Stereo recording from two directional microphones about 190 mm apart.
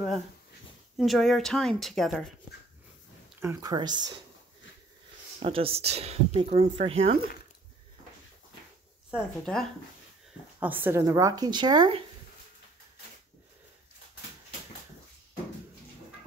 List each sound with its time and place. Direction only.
0.9 s speech: centre (ahead or behind)
3.3 s speech: 15° right (ahead or behind)
5.4 s speech: 30° right (ahead or behind)
9.1 s speech: centre (ahead or behind)
10.6 s speech: 10° right (ahead or behind)